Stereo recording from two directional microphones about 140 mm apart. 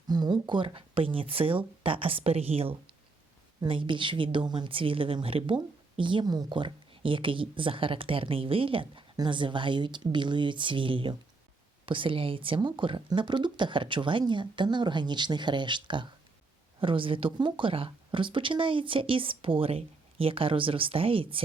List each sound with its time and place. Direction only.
0.1 s speech: 30° right (ahead or behind)